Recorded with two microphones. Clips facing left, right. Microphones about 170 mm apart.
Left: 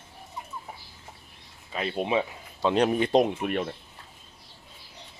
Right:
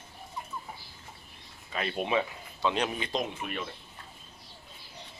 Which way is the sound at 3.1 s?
60° left (ahead or behind).